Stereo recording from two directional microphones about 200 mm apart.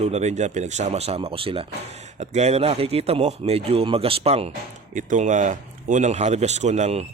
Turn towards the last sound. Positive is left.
turn(degrees=-35)  # may be behind; listen again after turning